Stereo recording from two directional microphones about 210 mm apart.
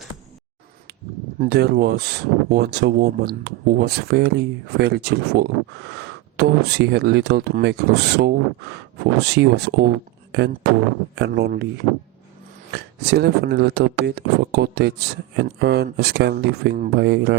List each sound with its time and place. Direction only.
1.4 s speech: 50° right (ahead or behind)
12.7 s speech: 50° right (ahead or behind)